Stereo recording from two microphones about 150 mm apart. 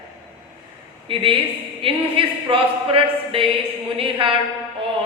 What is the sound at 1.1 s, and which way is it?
Speech, 35° right (ahead or behind).